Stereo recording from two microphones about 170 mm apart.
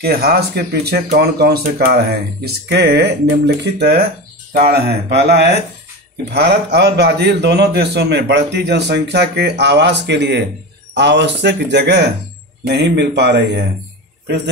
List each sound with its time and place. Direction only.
0.0 s a man's voice: 70° right (ahead or behind); by 14.5 s 90° right